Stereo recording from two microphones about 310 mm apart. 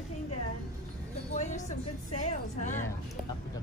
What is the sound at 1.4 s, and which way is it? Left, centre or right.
Music, left.